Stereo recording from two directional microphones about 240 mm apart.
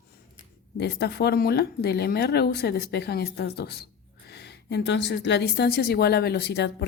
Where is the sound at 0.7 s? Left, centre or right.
Left.